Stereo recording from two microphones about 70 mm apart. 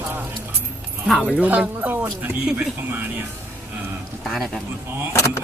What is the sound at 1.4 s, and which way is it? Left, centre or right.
Speech, right.